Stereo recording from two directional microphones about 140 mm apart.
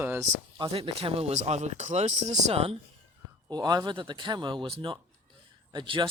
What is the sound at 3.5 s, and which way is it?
Speech, 30° right (ahead or behind).